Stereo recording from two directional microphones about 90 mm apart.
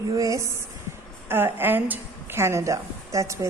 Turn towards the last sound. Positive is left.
turn(degrees=-35)  # may be behind; listen again after turning